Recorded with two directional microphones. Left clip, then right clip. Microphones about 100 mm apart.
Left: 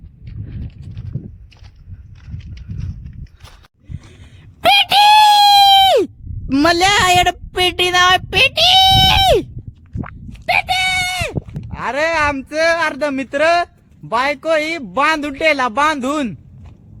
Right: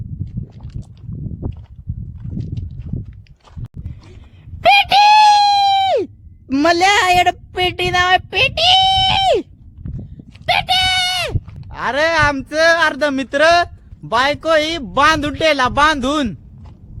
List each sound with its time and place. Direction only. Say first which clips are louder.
4.6 s wail: even; 55° left (ahead or behind)
6.5 s a woman's voice: even; 20° left (ahead or behind)
10.4 s a sound: right 1 dB; 5° right (ahead or behind)
11.7 s speech: right 1 dB; 10° right (ahead or behind)
12.4 s a sound: right 2 dB; 25° right (ahead or behind)
14.1 s speech: right 2 dB; 20° right (ahead or behind)
15.5 s speech: right 2 dB; 5° right (ahead or behind)